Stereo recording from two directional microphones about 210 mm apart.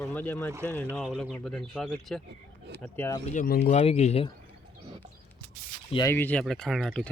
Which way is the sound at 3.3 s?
45° left (ahead or behind).